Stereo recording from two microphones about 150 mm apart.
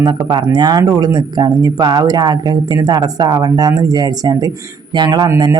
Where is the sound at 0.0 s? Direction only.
30° right (ahead or behind).